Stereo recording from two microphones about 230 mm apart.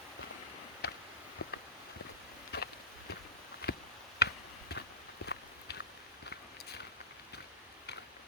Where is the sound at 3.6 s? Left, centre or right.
Left.